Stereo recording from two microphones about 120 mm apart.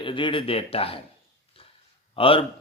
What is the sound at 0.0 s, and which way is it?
Speech, 45° left (ahead or behind).